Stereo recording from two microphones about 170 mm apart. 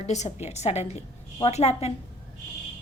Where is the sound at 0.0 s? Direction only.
40° left (ahead or behind).